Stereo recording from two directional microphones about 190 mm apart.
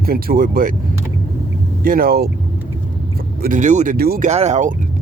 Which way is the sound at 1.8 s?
50° right (ahead or behind).